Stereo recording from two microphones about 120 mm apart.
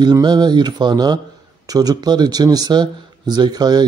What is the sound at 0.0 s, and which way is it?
Speech, 35° right (ahead or behind).